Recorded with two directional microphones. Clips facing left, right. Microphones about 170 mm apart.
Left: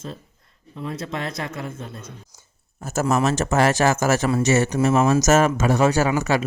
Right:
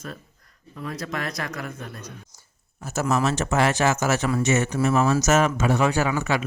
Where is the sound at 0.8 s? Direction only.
25° left (ahead or behind).